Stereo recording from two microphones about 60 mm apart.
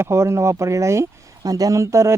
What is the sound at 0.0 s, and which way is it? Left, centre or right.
Speech, right.